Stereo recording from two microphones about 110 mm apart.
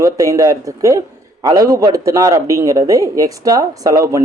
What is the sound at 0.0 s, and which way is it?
Speech, 30° right (ahead or behind).